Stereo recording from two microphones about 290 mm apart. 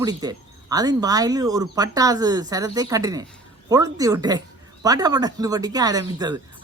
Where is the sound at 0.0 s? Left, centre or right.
Centre.